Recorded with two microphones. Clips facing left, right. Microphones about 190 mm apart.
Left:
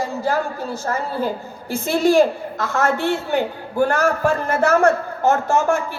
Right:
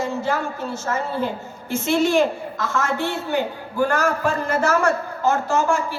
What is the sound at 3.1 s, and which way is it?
A man's voice, 50° left (ahead or behind).